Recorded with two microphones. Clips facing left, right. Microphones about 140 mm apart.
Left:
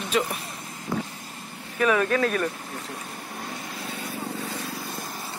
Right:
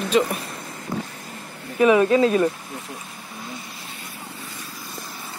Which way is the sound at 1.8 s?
15° right (ahead or behind).